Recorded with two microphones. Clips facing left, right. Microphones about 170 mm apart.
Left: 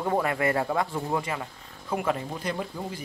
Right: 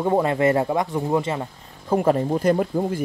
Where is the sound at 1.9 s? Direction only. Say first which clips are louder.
Right 9 dB; 40° right (ahead or behind).